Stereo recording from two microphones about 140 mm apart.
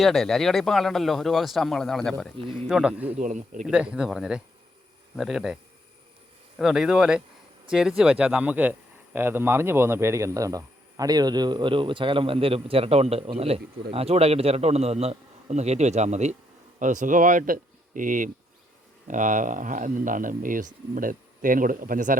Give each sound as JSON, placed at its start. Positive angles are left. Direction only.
{"t": 0.0, "sound": "speech", "side_deg": 0}
{"t": 3.2, "sound": "speech", "side_deg": -65}
{"t": 3.6, "sound": "speech", "side_deg": -10}
{"t": 6.6, "sound": "speech", "side_deg": -5}